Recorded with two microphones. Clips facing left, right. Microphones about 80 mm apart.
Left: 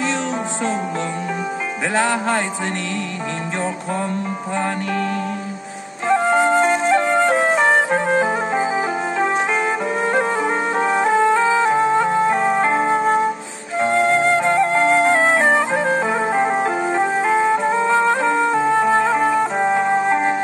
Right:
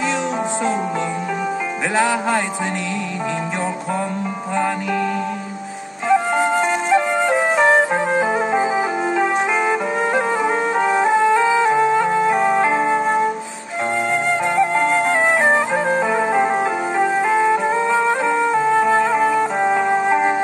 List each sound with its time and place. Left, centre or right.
2.0 s music: centre
6.0 s music: centre
6.9 s flute: centre
9.2 s music: centre
14.1 s music: left
14.4 s music: centre
14.8 s music: left
15.0 s music: centre